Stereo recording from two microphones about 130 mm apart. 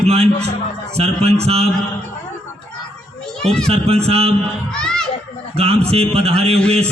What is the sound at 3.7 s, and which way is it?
Speech, 50° right (ahead or behind).